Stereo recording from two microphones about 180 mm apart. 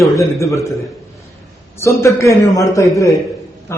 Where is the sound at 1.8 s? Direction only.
15° left (ahead or behind).